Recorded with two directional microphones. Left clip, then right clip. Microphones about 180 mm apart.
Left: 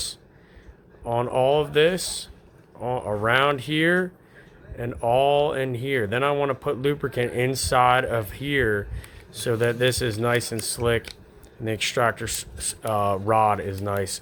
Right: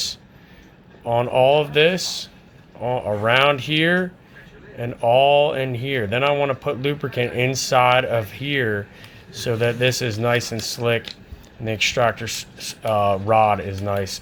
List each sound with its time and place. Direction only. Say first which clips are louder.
1.0 s speech: right 5 dB; 15° left (ahead or behind)